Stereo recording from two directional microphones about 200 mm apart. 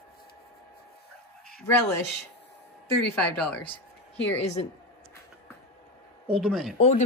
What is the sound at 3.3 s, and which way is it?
Speech, 5° left (ahead or behind).